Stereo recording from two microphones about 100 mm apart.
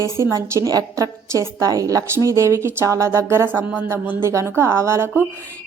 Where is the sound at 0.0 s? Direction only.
30° right (ahead or behind).